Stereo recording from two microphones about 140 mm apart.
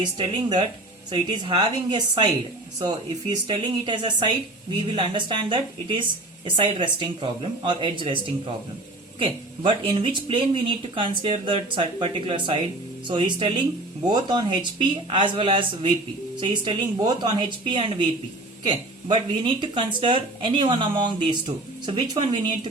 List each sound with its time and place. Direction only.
0.0 s a man's voice: 30° right (ahead or behind)